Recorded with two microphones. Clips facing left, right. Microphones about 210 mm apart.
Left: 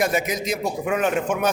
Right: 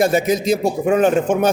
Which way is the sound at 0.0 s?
30° right (ahead or behind).